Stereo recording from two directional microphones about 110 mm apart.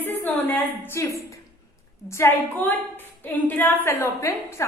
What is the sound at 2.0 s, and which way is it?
A woman's voice, 25° left (ahead or behind).